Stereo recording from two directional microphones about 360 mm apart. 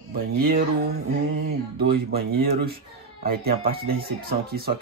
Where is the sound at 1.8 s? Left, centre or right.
Right.